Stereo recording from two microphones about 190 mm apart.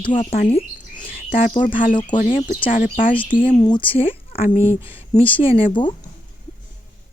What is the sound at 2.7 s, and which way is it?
Speech, 45° left (ahead or behind).